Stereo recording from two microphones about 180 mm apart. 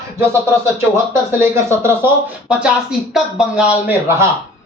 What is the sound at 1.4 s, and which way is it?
Speech, 15° right (ahead or behind).